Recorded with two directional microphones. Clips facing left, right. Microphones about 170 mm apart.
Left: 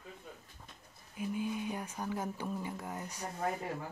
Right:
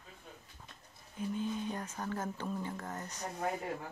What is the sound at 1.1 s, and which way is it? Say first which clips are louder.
Speech: even; 10° left (ahead or behind).